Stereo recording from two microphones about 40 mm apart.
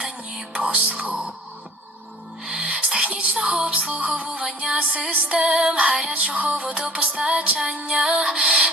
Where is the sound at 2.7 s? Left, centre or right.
Right.